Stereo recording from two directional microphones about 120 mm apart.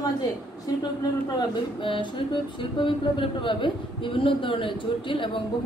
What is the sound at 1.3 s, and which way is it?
Music, 45° left (ahead or behind).